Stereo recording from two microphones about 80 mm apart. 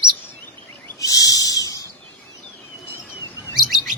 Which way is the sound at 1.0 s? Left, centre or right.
Left.